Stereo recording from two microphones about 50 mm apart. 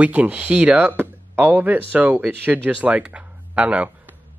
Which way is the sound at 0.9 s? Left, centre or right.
Right.